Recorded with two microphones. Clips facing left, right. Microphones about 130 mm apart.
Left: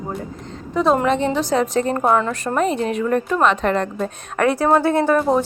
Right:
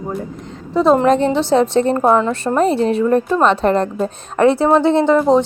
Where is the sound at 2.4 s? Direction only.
30° right (ahead or behind).